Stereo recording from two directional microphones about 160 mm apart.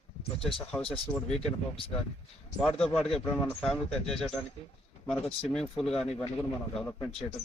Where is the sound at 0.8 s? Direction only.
35° left (ahead or behind).